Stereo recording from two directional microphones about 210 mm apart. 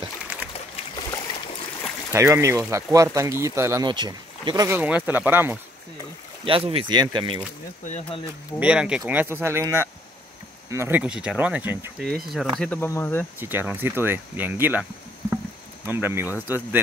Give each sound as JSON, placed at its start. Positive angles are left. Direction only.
{"t": 0.9, "sound": "boat", "side_deg": 20}
{"t": 2.1, "sound": "speech", "side_deg": -15}
{"t": 6.4, "sound": "speech", "side_deg": -25}
{"t": 7.8, "sound": "speech", "side_deg": 30}
{"t": 8.5, "sound": "speech", "side_deg": -5}
{"t": 13.4, "sound": "speech", "side_deg": -10}